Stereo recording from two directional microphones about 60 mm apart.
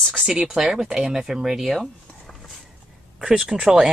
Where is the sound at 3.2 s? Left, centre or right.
Centre.